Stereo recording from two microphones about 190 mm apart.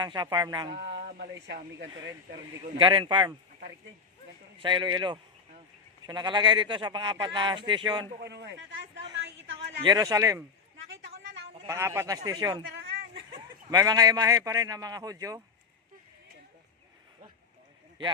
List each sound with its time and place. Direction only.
0.0 s speech: 20° right (ahead or behind)
0.7 s speech: 55° right (ahead or behind)
2.7 s speech: 25° right (ahead or behind)
4.6 s speech: 25° right (ahead or behind)
8.1 s speech: 60° right (ahead or behind)
9.8 s speech: 20° right (ahead or behind)
10.8 s a sound: 65° right (ahead or behind)
11.6 s speech: 15° right (ahead or behind)
12.6 s a sound: 65° right (ahead or behind)
13.7 s speech: 20° right (ahead or behind)